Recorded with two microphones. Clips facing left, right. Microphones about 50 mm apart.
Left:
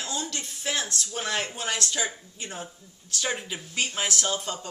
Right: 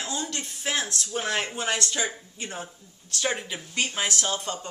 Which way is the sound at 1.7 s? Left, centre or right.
Centre.